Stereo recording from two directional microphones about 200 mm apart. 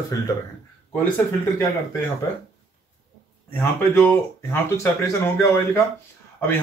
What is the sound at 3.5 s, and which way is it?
Speech, 10° left (ahead or behind).